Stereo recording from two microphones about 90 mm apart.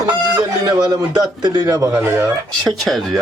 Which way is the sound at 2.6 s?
Centre (ahead or behind).